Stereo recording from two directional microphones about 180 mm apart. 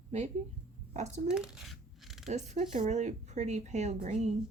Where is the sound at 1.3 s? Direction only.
5° right (ahead or behind).